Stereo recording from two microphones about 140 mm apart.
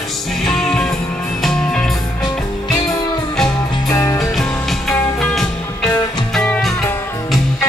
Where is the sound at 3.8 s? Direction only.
25° left (ahead or behind).